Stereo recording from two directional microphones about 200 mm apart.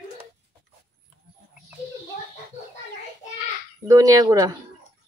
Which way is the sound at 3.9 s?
15° right (ahead or behind).